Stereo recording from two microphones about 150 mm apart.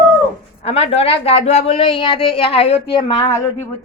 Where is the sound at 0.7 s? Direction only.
45° left (ahead or behind).